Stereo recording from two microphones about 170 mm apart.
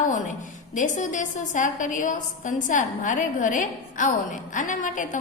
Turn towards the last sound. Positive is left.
turn(degrees=50)  # may be behind; listen again after turning